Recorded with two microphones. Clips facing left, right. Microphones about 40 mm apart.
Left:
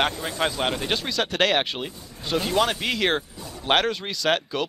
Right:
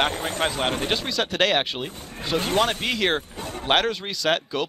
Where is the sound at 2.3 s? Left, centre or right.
Right.